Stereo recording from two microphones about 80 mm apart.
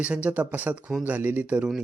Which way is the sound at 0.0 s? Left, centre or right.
Centre.